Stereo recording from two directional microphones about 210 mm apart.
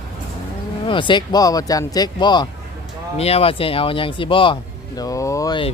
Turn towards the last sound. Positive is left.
turn(degrees=20)  # may be behind; listen again after turning